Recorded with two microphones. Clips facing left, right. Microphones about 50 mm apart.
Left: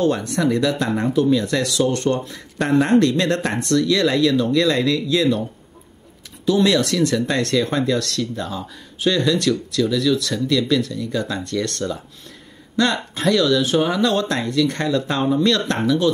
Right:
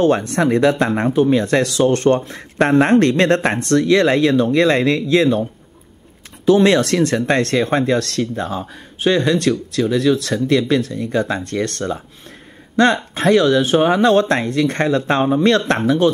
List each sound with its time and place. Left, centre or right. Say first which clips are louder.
0.0 s speech: right 4 dB; right
6.4 s speech: right 4 dB; right